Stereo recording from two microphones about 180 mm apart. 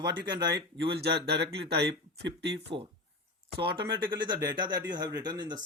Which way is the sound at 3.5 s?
25° right (ahead or behind).